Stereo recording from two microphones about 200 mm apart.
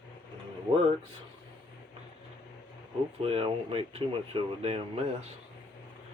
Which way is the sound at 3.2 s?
30° right (ahead or behind).